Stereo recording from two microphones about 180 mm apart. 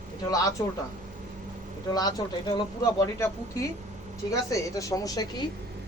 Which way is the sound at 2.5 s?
20° left (ahead or behind).